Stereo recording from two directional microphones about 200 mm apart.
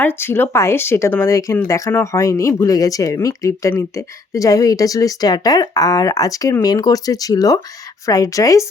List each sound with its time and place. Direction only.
0.0 s speech: 10° left (ahead or behind)